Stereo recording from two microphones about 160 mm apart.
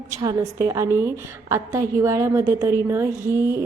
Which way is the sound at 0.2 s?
20° right (ahead or behind).